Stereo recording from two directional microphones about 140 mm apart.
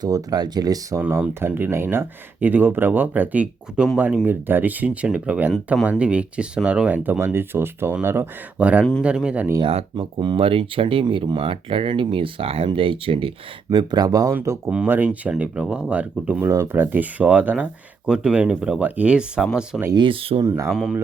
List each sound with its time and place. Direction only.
0.0 s speech: 30° right (ahead or behind)
1.0 s speech: 15° right (ahead or behind)
9.6 s speech: 40° right (ahead or behind); by 19.5 s 5° right (ahead or behind)
20.0 s speech: 40° right (ahead or behind)
20.7 s a man's voice: centre (ahead or behind)